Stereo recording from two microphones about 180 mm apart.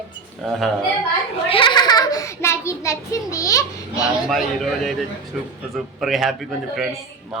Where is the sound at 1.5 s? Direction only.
30° left (ahead or behind).